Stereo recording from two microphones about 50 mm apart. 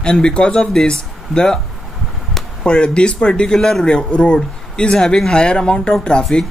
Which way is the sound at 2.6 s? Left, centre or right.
Centre.